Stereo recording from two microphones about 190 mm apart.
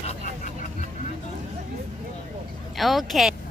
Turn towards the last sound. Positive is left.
turn(degrees=0)  # may be behind; listen again after turning